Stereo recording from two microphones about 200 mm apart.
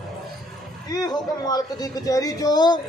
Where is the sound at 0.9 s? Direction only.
20° left (ahead or behind).